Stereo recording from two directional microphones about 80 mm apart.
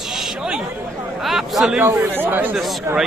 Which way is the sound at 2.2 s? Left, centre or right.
Right.